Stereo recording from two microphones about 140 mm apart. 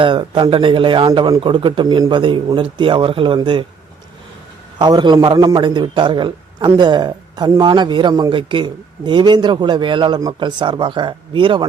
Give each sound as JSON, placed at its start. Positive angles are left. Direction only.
{"t": 0.0, "sound": "a man's voice", "side_deg": -35}
{"t": 4.8, "sound": "a man's voice", "side_deg": -30}